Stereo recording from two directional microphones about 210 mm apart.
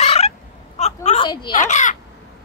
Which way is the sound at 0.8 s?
30° left (ahead or behind).